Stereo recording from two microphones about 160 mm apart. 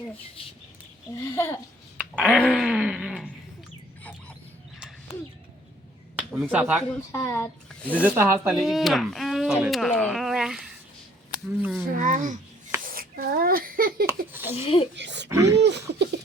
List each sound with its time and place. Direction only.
1.2 s a child's voice: 15° left (ahead or behind)
2.0 s a sound: 10° right (ahead or behind)
2.3 s wail: centre (ahead or behind)
6.5 s speech: 10° right (ahead or behind)
7.1 s speech: 20° left (ahead or behind)
7.9 s speech: 10° right (ahead or behind)
8.6 s speech: centre (ahead or behind)
11.9 s a child's voice: 50° right (ahead or behind)
12.8 s a sound: 65° right (ahead or behind)
14.1 s speech: 15° right (ahead or behind)
14.5 s speech: 40° left (ahead or behind)
14.9 s a sound: 90° right
15.3 s speech: 20° right (ahead or behind)
15.5 s speech: 90° right